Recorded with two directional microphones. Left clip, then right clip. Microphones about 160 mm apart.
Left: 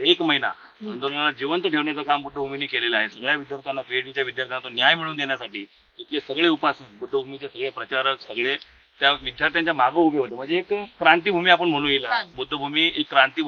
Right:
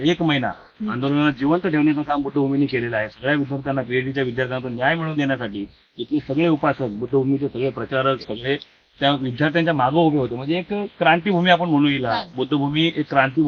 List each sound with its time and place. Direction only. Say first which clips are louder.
0.0 s speech: even; 20° left (ahead or behind)